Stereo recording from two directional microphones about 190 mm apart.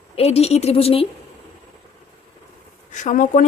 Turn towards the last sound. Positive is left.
turn(degrees=45)  # may be behind; listen again after turning